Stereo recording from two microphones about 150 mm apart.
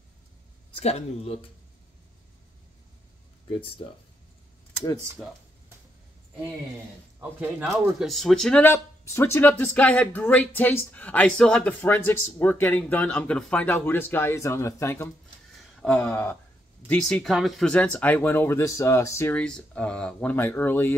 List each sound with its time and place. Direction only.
0.7 s speech: 45° left (ahead or behind)
7.2 s speech: 10° right (ahead or behind); by 15.0 s 20° left (ahead or behind)
15.8 s speech: 5° left (ahead or behind)